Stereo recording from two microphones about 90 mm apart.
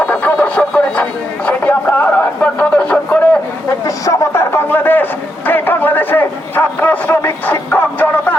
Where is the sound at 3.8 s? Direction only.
35° left (ahead or behind).